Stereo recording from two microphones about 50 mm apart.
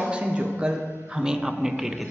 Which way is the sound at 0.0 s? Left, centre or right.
Right.